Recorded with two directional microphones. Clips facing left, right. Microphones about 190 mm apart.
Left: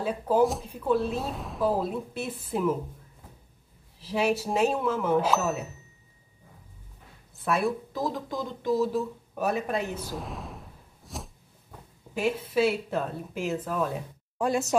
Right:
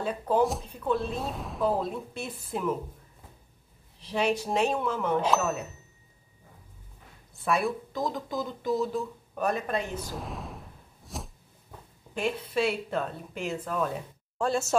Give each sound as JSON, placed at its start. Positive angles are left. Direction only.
{"t": 0.0, "sound": "speech", "side_deg": 5}
{"t": 4.0, "sound": "speech", "side_deg": 5}
{"t": 7.3, "sound": "speech", "side_deg": 0}
{"t": 14.4, "sound": "speech", "side_deg": 15}